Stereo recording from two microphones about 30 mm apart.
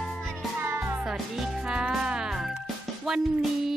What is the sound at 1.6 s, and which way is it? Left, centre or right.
Speech, right.